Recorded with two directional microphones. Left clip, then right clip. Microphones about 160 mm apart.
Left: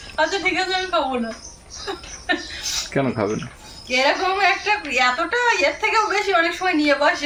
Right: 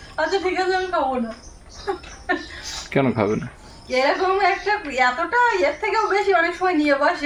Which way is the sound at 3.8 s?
25° right (ahead or behind).